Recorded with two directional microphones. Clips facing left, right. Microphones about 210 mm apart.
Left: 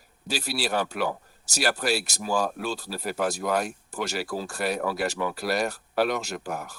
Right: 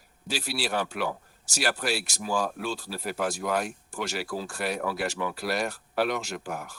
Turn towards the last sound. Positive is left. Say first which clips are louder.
# left 2 dB
turn(degrees=40)  # may be behind; listen again after turning